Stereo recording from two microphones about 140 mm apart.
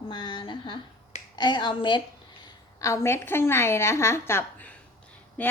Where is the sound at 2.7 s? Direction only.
20° left (ahead or behind).